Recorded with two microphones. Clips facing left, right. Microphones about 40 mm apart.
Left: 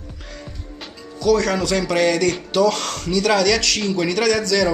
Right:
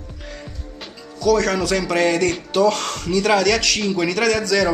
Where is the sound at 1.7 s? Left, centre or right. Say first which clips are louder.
Even; centre.